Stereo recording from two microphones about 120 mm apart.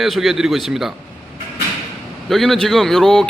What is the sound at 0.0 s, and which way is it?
Speech, centre (ahead or behind).